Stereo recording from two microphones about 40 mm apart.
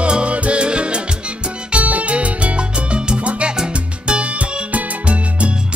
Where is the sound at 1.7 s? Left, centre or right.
Right.